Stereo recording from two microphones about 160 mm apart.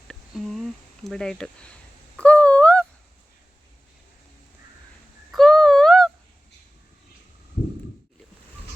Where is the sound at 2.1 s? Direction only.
10° left (ahead or behind).